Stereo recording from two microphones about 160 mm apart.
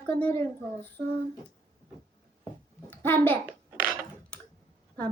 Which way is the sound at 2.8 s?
10° left (ahead or behind).